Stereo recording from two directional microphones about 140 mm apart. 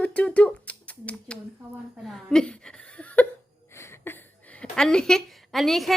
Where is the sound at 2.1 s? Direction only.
5° left (ahead or behind).